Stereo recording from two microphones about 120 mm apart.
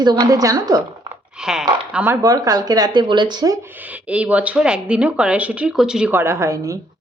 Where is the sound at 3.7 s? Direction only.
10° right (ahead or behind).